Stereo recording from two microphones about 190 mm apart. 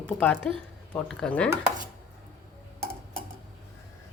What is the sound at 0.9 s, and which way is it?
Speech, 5° left (ahead or behind).